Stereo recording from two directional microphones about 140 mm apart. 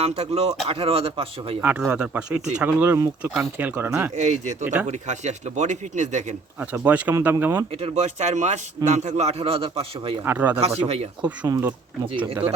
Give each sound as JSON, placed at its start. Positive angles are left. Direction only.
{"t": 0.0, "sound": "a man's voice", "side_deg": -50}
{"t": 1.6, "sound": "speech", "side_deg": -10}
{"t": 3.2, "sound": "speech", "side_deg": -5}
{"t": 4.1, "sound": "speech", "side_deg": -55}
{"t": 4.6, "sound": "speech", "side_deg": -10}
{"t": 4.9, "sound": "speech", "side_deg": -55}
{"t": 6.6, "sound": "speech", "side_deg": -10}
{"t": 7.7, "sound": "a man's voice", "side_deg": -45}
{"t": 10.2, "sound": "speech", "side_deg": -10}
{"t": 10.6, "sound": "a man's voice", "side_deg": -45}
{"t": 11.4, "sound": "speech", "side_deg": -20}